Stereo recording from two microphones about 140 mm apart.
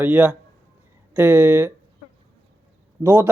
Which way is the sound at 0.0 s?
10° right (ahead or behind).